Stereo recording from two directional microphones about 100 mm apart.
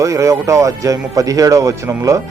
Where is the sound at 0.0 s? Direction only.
30° right (ahead or behind).